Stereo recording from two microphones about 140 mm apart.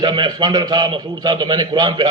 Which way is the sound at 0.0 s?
30° right (ahead or behind).